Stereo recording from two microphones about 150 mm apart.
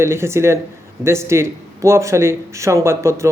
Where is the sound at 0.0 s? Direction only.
15° right (ahead or behind).